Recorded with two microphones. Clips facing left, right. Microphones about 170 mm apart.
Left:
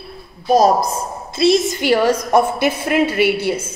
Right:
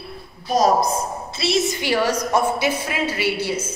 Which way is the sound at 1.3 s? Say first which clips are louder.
Left 7 dB; 50° left (ahead or behind).